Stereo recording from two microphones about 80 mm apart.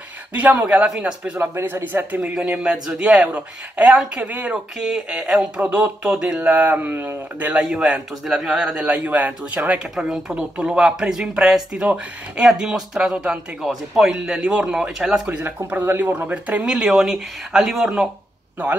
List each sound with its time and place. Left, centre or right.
0.3 s speech: right
1.4 s speech: right
2.9 s speech: centre
3.3 s speech: centre
4.8 s speech: centre; by 7.4 s right
7.4 s speech: centre
9.9 s speech: centre